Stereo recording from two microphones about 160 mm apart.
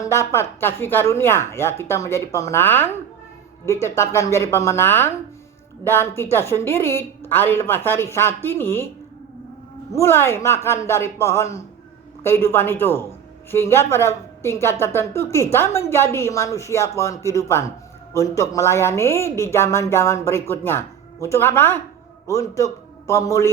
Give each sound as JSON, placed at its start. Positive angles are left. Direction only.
{"t": 0.0, "sound": "speech", "side_deg": 20}
{"t": 9.9, "sound": "a man's voice", "side_deg": 15}